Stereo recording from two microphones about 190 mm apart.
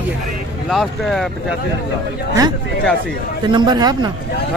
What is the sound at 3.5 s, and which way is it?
Speech, 25° right (ahead or behind).